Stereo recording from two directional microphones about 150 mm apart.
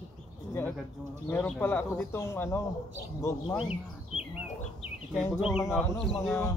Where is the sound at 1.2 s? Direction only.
15° left (ahead or behind).